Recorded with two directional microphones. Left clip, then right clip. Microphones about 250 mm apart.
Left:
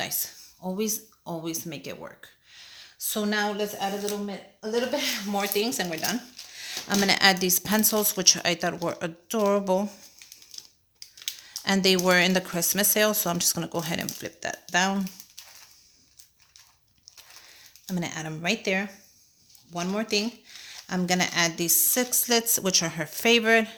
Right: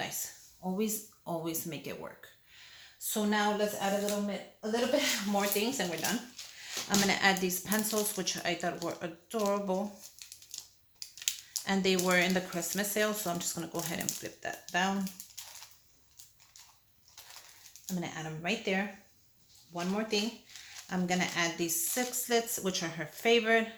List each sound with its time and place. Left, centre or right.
0.0 s a woman's voice: left
5.4 s speech: left
11.2 s a sound: centre
11.6 s speech: left
17.8 s speech: left